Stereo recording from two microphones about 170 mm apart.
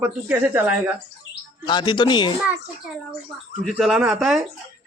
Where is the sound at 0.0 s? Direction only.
10° right (ahead or behind).